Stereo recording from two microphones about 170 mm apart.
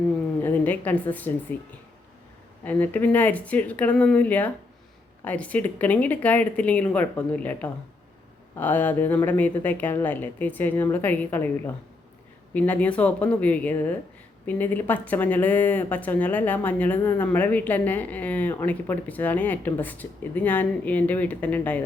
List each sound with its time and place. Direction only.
0.4 s a woman's voice: 10° left (ahead or behind)
2.6 s speech: 10° left (ahead or behind)